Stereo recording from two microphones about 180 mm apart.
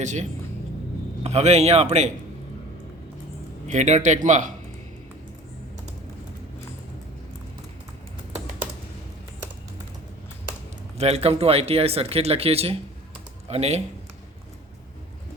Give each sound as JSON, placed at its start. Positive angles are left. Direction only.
{"t": 0.0, "sound": "speech", "side_deg": -40}
{"t": 3.7, "sound": "speech", "side_deg": -40}
{"t": 10.9, "sound": "speech", "side_deg": -35}